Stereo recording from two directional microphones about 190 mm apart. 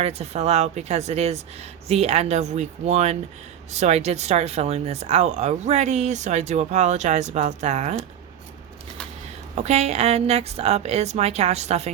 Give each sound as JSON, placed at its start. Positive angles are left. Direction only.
{"t": 0.0, "sound": "speech", "side_deg": -35}
{"t": 9.6, "sound": "speech", "side_deg": -35}